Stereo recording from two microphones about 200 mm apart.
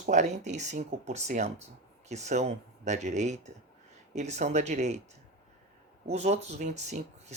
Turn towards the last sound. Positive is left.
turn(degrees=-35)  # may be behind; listen again after turning